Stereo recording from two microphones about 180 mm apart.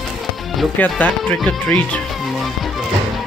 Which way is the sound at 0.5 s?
10° left (ahead or behind).